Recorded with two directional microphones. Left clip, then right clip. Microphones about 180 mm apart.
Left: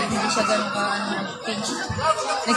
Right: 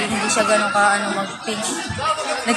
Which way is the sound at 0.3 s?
25° right (ahead or behind).